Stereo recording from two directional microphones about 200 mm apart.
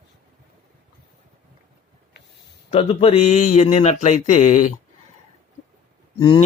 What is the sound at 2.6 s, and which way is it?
A man's voice, 30° left (ahead or behind).